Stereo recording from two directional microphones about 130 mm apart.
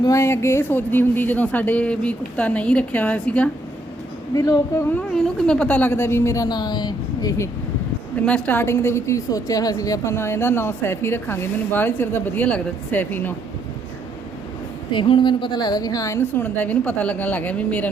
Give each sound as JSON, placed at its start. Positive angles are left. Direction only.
{"t": 0.0, "sound": "a woman's voice", "side_deg": 25}
{"t": 4.4, "sound": "a woman's voice", "side_deg": 25}
{"t": 4.9, "sound": "a woman's voice", "side_deg": 10}
{"t": 8.2, "sound": "a woman's voice", "side_deg": 10}
{"t": 14.9, "sound": "a woman's voice", "side_deg": 40}